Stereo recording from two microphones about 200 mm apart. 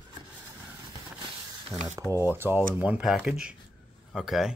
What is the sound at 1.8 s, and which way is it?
Speech, 15° right (ahead or behind).